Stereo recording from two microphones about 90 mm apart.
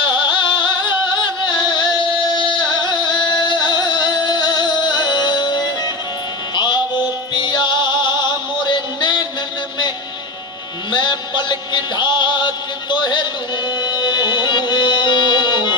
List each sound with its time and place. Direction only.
0.0 s music: 65° left (ahead or behind)
8.6 s a sound: 60° left (ahead or behind)
10.9 s music: 60° left (ahead or behind)